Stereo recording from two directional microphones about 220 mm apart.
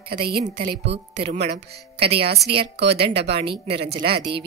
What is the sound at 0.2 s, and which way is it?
Speech, 20° right (ahead or behind).